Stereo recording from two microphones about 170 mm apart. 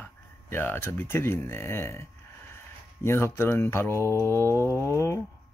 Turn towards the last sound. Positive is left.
turn(degrees=15)  # may be behind; listen again after turning